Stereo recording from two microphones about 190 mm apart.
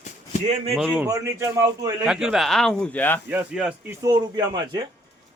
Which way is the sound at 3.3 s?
5° right (ahead or behind).